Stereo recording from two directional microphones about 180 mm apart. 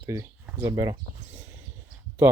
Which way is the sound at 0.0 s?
15° right (ahead or behind).